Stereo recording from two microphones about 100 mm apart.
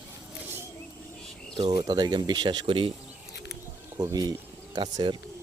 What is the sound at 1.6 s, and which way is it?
Speech, 45° right (ahead or behind).